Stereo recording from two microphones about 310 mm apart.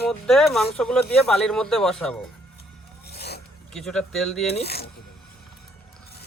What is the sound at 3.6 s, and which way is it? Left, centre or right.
Speech, centre.